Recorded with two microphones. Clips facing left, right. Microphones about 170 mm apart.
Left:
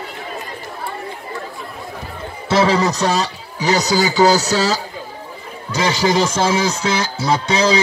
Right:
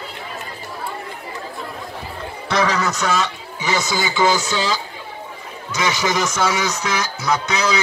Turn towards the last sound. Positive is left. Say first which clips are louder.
# left 4 dB
turn(degrees=30)  # may be behind; listen again after turning